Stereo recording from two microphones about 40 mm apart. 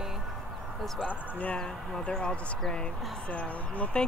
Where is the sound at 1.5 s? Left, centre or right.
Left.